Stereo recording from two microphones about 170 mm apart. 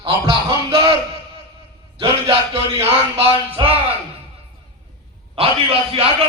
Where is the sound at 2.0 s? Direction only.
35° right (ahead or behind).